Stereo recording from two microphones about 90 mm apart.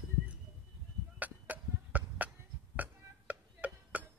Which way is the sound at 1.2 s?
15° right (ahead or behind).